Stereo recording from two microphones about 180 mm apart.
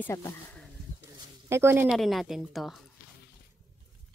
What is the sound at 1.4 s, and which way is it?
Speech, 15° right (ahead or behind).